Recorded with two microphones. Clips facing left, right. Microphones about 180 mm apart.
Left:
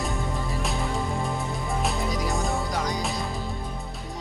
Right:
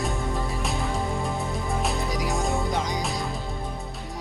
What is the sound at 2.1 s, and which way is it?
Music, 15° right (ahead or behind).